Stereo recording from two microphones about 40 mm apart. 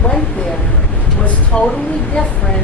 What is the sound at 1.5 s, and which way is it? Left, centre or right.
Speech, left.